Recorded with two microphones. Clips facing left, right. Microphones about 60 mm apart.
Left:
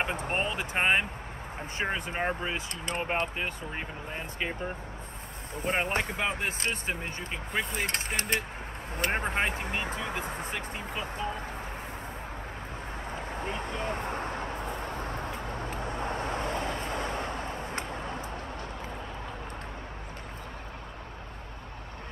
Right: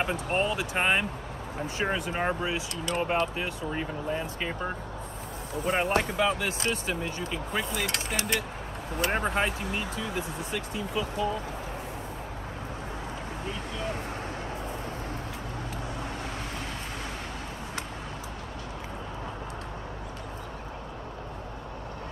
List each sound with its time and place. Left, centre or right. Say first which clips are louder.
0.1 s speech: right 3 dB; left
0.7 s speech: left 1 dB; centre
2.5 s speech: right 3 dB; left
5.5 s speech: right 3 dB; left
13.1 s a sound: left 1 dB; left
15.6 s vehicle: left 3 dB; left